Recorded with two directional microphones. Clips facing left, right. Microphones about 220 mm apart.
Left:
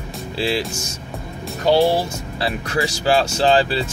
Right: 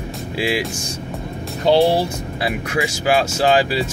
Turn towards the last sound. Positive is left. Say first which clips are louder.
# even
turn(degrees=-10)  # may be behind; listen again after turning